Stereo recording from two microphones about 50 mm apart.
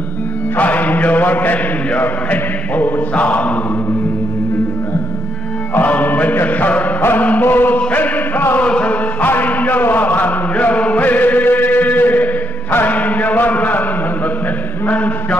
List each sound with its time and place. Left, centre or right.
0.6 s mantra: left
2.0 s a sound: left
5.8 s music: left
6.3 s mantra: left
7.0 s music: left
7.4 s chant: left
8.5 s a sound: left
9.2 s music: left
10.5 s chant: left
14.9 s a sound: left